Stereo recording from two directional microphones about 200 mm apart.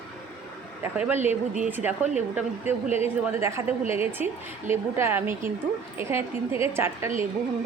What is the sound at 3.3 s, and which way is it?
A woman's voice, 15° right (ahead or behind).